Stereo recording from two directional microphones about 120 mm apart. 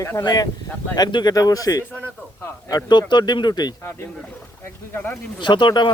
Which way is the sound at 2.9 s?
40° left (ahead or behind).